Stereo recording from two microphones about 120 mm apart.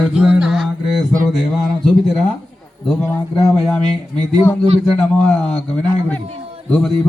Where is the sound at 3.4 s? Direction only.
5° left (ahead or behind).